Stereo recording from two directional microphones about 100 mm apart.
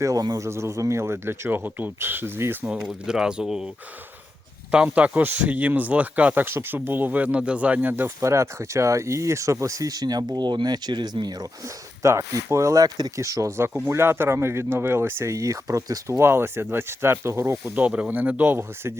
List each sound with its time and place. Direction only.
0.0 s speech: 40° right (ahead or behind); by 2.6 s 20° right (ahead or behind)
2.6 s speech: 5° right (ahead or behind)
4.7 s speech: 10° right (ahead or behind); by 11.4 s 40° right (ahead or behind)
11.6 s speech: 30° right (ahead or behind)
17.7 s speech: 15° right (ahead or behind)